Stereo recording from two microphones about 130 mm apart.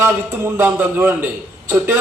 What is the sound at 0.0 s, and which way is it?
A man's voice, 15° right (ahead or behind).